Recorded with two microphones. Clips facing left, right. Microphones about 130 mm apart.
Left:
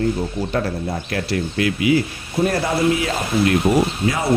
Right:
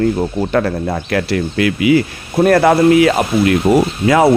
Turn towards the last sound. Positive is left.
turn(degrees=-90)